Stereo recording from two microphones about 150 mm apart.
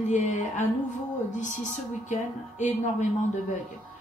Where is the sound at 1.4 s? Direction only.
55° left (ahead or behind).